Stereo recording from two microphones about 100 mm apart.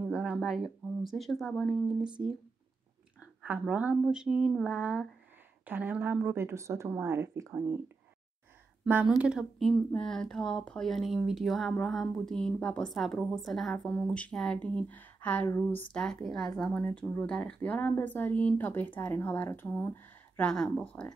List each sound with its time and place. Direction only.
0.0 s a sound: 10° right (ahead or behind)
1.0 s speech: centre (ahead or behind)
2.0 s a woman's voice: 10° right (ahead or behind)
3.4 s a woman's voice: 15° right (ahead or behind)
9.2 s a woman's voice: 10° right (ahead or behind)
9.8 s speech: 10° left (ahead or behind)
16.0 s speech: 5° left (ahead or behind)
16.7 s speech: 15° left (ahead or behind)
20.4 s speech: 10° left (ahead or behind)